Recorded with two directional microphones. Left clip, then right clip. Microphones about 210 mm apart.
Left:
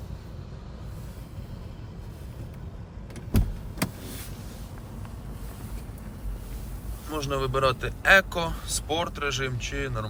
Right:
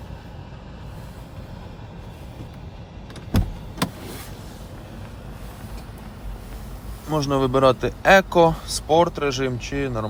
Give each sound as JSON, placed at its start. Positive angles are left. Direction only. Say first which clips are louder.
{"t": 7.2, "sound": "a man's voice", "louder": "right 7 dB", "side_deg": -25}